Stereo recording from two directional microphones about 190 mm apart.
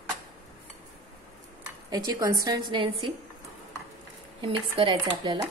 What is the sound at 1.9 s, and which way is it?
A woman's voice, 20° right (ahead or behind).